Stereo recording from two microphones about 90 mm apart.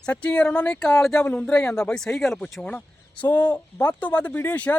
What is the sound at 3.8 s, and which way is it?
Speech, 15° left (ahead or behind).